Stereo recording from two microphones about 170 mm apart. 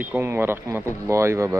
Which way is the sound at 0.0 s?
10° right (ahead or behind).